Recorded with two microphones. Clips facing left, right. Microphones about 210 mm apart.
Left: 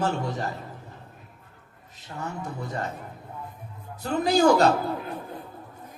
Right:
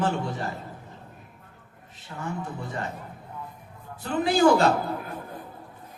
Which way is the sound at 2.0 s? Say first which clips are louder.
Right 1 dB; 40° left (ahead or behind).